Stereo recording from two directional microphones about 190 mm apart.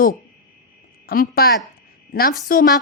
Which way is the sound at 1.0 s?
50° left (ahead or behind).